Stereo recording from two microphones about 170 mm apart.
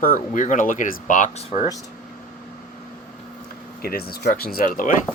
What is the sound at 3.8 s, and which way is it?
Speech, 65° left (ahead or behind).